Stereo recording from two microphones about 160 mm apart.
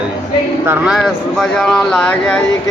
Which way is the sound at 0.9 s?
Centre (ahead or behind).